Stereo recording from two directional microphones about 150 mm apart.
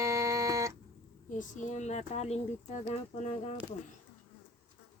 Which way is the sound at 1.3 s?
55° left (ahead or behind).